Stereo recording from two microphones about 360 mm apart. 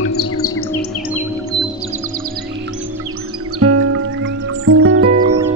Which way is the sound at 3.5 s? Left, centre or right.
Right.